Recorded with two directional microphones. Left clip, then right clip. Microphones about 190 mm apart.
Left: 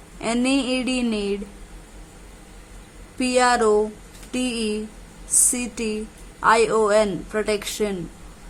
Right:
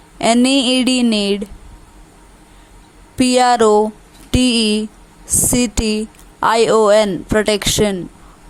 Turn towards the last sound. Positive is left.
turn(degrees=-35)  # may be behind; listen again after turning